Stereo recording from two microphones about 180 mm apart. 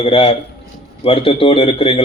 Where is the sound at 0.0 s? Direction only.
35° left (ahead or behind).